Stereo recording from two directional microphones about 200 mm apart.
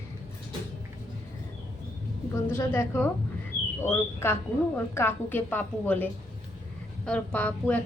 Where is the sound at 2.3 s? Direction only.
10° left (ahead or behind).